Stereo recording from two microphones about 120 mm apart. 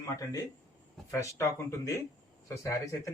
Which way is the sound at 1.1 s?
25° left (ahead or behind).